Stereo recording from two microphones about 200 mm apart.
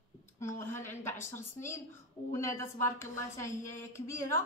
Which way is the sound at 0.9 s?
10° left (ahead or behind).